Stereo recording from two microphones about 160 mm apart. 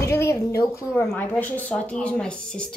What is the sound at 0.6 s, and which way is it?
Speech, 15° left (ahead or behind).